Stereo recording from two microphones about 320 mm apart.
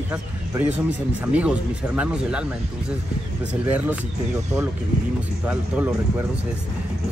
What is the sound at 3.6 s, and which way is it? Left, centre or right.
Speech, centre.